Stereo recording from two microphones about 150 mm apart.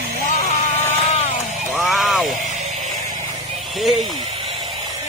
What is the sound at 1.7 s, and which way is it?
Vehicle, centre (ahead or behind).